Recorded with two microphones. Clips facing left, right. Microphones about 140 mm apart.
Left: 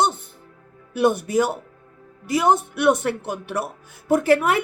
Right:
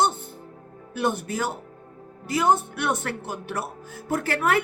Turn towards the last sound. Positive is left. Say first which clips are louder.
# left 6 dB
turn(degrees=15)  # may be behind; listen again after turning